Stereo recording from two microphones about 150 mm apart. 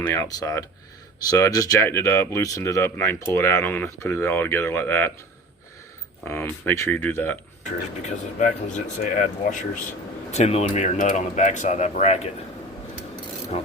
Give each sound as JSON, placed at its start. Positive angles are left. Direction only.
{"t": 0.1, "sound": "speech", "side_deg": 20}
{"t": 6.2, "sound": "speech", "side_deg": 15}
{"t": 8.0, "sound": "speech", "side_deg": 55}
{"t": 10.3, "sound": "speech", "side_deg": 45}